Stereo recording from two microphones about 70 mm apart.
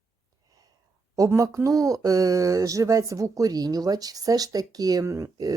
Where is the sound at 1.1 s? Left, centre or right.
Right.